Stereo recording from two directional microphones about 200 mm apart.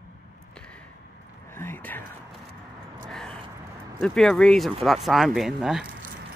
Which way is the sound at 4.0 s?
Centre (ahead or behind).